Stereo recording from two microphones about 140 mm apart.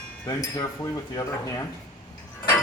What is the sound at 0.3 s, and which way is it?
Speech, 25° left (ahead or behind).